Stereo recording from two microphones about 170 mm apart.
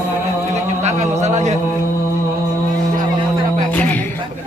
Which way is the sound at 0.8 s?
40° right (ahead or behind).